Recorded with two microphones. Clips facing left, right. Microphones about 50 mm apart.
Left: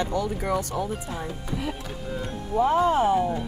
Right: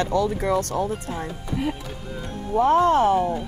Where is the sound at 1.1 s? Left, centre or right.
Right.